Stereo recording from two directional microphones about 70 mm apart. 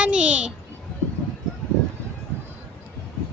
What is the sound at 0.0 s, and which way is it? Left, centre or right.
Speech, centre.